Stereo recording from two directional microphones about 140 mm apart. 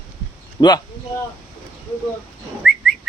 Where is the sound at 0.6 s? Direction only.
30° left (ahead or behind).